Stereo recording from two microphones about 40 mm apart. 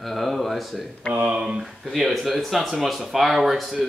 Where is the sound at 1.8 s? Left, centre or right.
Centre.